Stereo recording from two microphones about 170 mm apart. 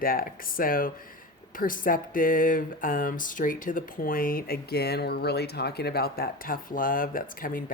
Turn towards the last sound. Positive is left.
turn(degrees=55)  # may be behind; listen again after turning